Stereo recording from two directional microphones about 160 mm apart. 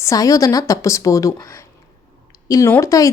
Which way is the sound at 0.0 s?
20° left (ahead or behind).